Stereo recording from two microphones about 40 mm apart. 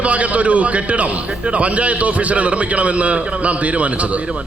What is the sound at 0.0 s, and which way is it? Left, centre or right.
A man's voice, right.